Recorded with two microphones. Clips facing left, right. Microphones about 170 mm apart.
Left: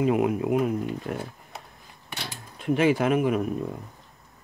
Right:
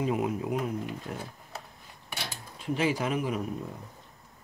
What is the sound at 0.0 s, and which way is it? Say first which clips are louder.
Speech: left 6 dB; 65° left (ahead or behind).